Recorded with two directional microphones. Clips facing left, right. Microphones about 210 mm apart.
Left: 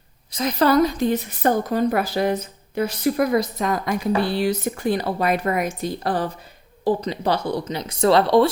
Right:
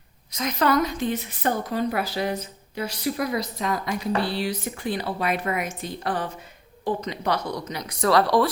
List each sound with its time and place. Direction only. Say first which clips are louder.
0.3 s a woman's voice: left 4 dB; 30° left (ahead or behind)